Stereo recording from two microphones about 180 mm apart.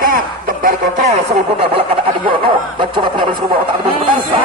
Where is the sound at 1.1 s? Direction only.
35° right (ahead or behind).